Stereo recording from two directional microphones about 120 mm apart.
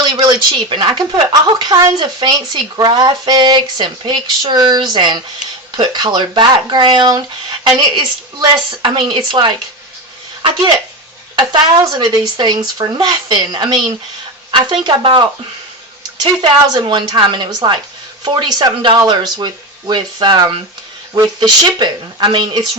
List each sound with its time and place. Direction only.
0.0 s speech: 40° right (ahead or behind)
11.3 s speech: 40° right (ahead or behind)
16.6 s speech: 35° right (ahead or behind)